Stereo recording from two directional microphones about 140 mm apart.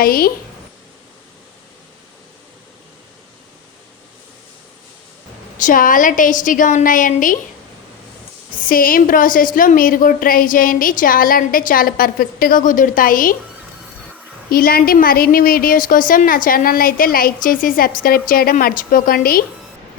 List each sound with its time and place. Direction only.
0.0 s a woman's voice: 90° left
5.5 s a woman's voice: 70° left (ahead or behind)
8.5 s a woman's voice: 85° left
14.5 s a woman's voice: 90° left